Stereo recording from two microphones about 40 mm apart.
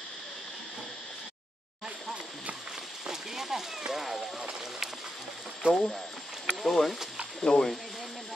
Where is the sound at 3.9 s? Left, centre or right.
Centre.